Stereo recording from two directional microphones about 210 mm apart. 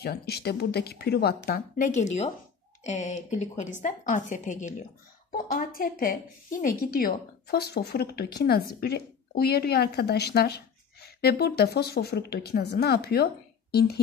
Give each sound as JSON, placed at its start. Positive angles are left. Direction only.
{"t": 0.0, "sound": "a woman's voice", "side_deg": 50}